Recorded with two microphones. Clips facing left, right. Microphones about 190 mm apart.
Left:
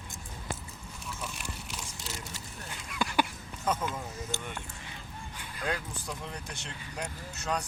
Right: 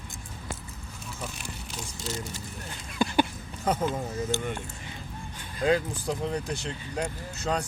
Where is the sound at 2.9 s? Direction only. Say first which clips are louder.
Right 5 dB; 30° right (ahead or behind).